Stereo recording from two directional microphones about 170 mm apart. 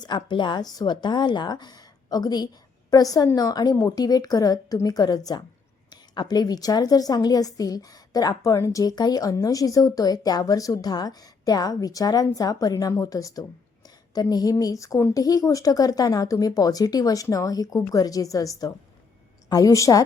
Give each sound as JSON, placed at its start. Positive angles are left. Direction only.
{"t": 0.0, "sound": "a woman's voice", "side_deg": 25}